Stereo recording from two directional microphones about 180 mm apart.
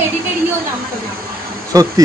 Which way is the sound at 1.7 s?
20° right (ahead or behind).